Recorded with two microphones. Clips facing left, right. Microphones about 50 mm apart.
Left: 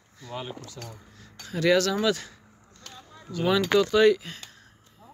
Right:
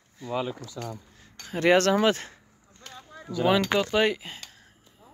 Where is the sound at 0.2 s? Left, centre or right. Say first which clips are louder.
Right 7 dB; centre.